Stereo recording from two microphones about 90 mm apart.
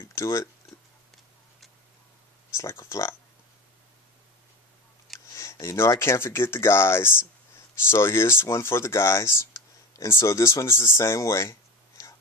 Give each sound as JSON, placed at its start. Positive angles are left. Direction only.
{"t": 0.0, "sound": "a sound", "side_deg": 30}
{"t": 0.7, "sound": "tick-tock", "side_deg": 0}
{"t": 2.5, "sound": "speech", "side_deg": 30}
{"t": 5.3, "sound": "speech", "side_deg": 30}